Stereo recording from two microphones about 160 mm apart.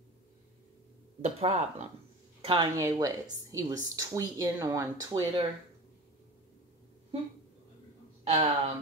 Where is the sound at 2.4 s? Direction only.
30° right (ahead or behind).